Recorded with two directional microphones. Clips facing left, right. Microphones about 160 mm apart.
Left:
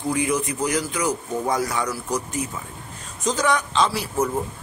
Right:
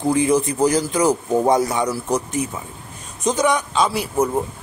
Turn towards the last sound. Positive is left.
turn(degrees=-15)  # may be behind; listen again after turning